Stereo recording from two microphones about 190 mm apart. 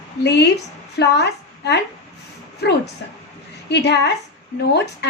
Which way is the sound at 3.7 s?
60° left (ahead or behind).